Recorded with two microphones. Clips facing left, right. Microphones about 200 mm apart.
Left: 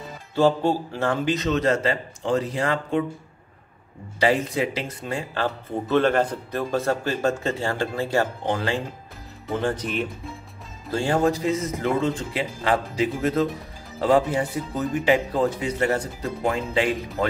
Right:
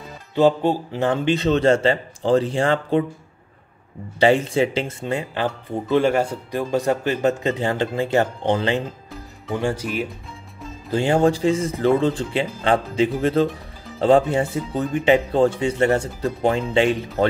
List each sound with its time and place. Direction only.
0.3 s speech: 20° right (ahead or behind)
4.2 s speech: 25° right (ahead or behind)
9.6 s speech: 10° right (ahead or behind)
10.9 s speech: 20° right (ahead or behind)